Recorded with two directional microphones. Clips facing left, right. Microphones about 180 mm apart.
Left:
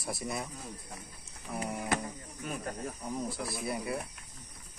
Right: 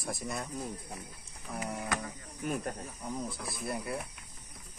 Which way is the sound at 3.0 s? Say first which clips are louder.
Left 1 dB; 5° left (ahead or behind).